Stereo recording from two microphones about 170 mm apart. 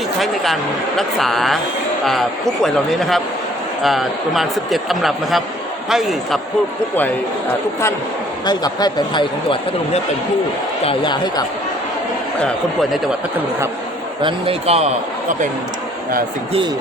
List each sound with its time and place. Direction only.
0.2 s a man's voice: centre (ahead or behind)
2.6 s a man's voice: centre (ahead or behind)
8.4 s speech: 25° left (ahead or behind)
14.2 s a man's voice: 30° right (ahead or behind)